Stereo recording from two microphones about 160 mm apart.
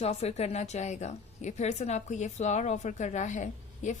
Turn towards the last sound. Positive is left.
turn(degrees=50)  # may be behind; listen again after turning